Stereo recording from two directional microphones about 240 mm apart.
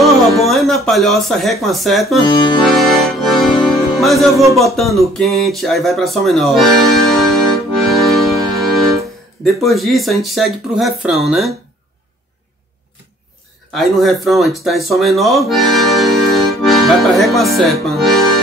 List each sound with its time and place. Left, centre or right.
0.0 s speech: centre
2.2 s accordion: centre
2.7 s accordion: centre
4.5 s speech: centre
7.9 s accordion: centre
9.4 s speech: centre
13.7 s speech: centre